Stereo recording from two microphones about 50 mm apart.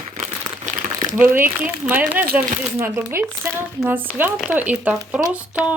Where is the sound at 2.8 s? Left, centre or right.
Right.